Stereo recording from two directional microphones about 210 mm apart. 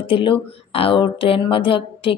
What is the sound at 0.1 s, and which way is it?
Speech, 25° left (ahead or behind).